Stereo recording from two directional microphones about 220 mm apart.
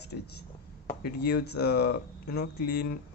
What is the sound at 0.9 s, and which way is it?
Speech, 45° left (ahead or behind).